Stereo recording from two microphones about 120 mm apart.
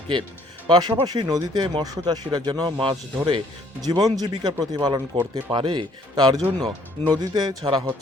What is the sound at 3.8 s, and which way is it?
Speech, 35° right (ahead or behind).